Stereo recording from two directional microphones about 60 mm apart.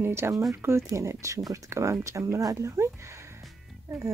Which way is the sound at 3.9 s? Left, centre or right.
Right.